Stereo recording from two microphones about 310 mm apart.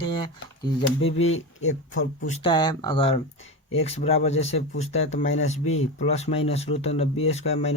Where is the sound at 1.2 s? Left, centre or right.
Left.